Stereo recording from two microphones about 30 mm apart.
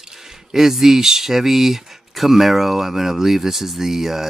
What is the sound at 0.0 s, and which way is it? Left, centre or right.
Speech, centre.